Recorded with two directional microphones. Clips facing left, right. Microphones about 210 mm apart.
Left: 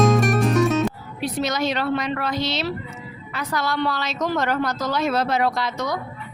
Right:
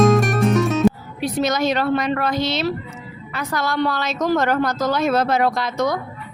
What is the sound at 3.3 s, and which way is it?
Speech, 50° right (ahead or behind).